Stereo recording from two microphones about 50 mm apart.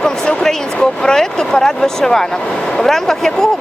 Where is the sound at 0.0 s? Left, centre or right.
Centre.